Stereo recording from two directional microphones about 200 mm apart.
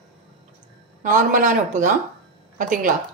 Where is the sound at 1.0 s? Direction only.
40° right (ahead or behind).